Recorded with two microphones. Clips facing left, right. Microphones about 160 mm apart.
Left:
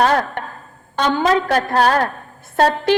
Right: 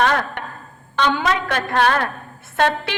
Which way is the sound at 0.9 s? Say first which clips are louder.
Left 3 dB; 40° left (ahead or behind).